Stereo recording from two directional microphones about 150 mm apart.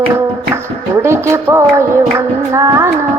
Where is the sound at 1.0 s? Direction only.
15° right (ahead or behind).